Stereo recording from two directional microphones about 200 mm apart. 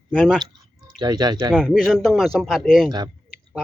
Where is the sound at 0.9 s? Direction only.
20° right (ahead or behind).